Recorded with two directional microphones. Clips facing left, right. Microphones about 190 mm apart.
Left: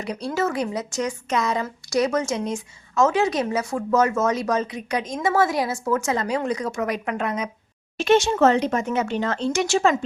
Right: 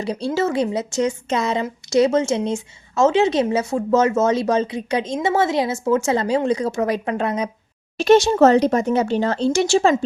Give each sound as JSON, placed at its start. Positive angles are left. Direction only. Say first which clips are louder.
{"t": 0.0, "sound": "a woman's voice", "louder": "right 4 dB", "side_deg": -30}